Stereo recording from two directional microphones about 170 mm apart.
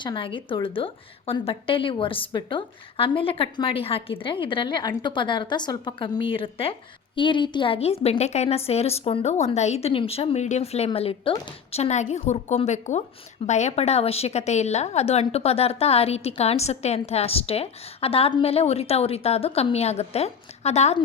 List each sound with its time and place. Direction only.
0.0 s a woman's voice: 30° left (ahead or behind)